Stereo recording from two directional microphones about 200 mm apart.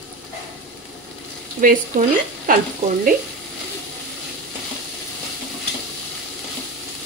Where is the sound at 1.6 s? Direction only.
40° right (ahead or behind).